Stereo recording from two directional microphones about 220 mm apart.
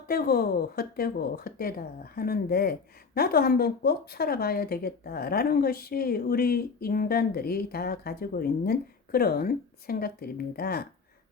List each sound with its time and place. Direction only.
0.1 s speech: 45° left (ahead or behind)